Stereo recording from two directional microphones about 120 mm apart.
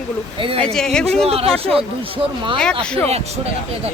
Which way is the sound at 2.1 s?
45° right (ahead or behind).